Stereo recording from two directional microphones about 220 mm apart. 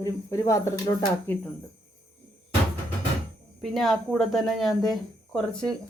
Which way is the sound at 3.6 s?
Centre (ahead or behind).